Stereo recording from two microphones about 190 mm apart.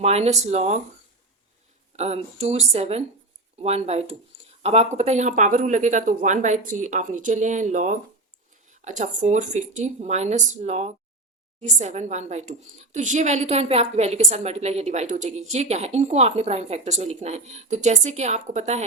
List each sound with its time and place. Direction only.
0.0 s a woman's voice: 35° right (ahead or behind)
2.0 s a woman's voice: 35° right (ahead or behind)